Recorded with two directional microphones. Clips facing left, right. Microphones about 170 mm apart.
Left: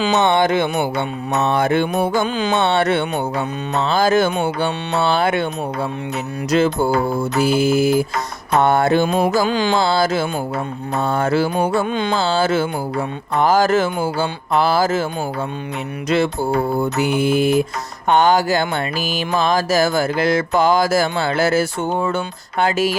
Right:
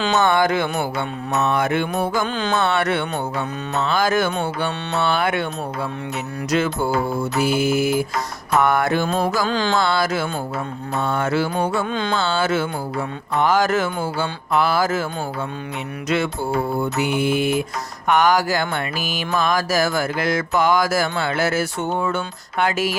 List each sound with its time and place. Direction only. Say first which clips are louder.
0.2 s mantra: left 1 dB; 25° left (ahead or behind)
2.2 s music: left 3 dB; 10° left (ahead or behind)
2.6 s mantra: left 3 dB; 25° left (ahead or behind)
6.5 s mantra: left 4 dB; 30° left (ahead or behind)
9.0 s music: left 4 dB; 10° left (ahead or behind)
9.7 s mantra: left 3 dB; 30° left (ahead or behind)
11.9 s music: left 3 dB; 15° left (ahead or behind)
12.1 s mantra: left 3 dB; 30° left (ahead or behind)
16.0 s mantra: left 4 dB; 30° left (ahead or behind)
18.1 s mantra: left 3 dB; 25° left (ahead or behind)